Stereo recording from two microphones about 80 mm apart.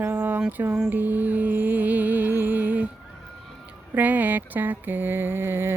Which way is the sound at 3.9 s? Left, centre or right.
Right.